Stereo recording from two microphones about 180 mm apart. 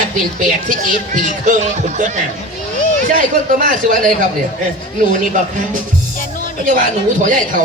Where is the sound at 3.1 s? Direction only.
45° right (ahead or behind).